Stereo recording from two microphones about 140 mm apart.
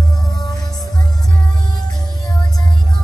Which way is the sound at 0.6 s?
30° left (ahead or behind).